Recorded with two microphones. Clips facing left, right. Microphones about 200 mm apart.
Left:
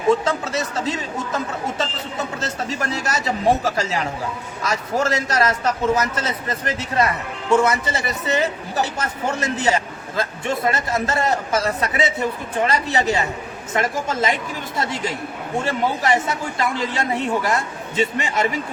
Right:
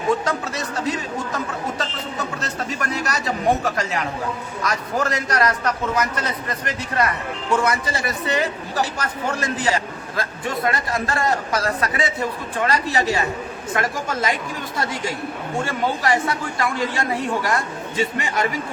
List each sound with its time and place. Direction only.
0.3 s a man's voice: 25° left (ahead or behind)
2.6 s a man's voice: 25° left (ahead or behind)